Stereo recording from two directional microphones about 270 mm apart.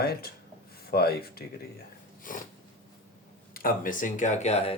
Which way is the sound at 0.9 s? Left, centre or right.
Left.